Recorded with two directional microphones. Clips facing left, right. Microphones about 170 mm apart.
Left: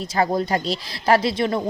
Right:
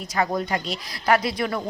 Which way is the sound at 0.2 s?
30° left (ahead or behind).